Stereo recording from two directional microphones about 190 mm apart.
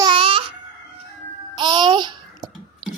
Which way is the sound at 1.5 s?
25° right (ahead or behind).